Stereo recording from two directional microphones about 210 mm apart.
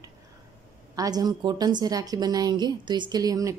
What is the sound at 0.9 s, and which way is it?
A woman's voice, 15° right (ahead or behind).